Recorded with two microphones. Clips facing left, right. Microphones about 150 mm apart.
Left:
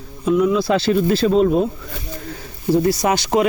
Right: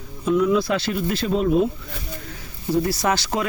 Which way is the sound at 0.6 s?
30° left (ahead or behind).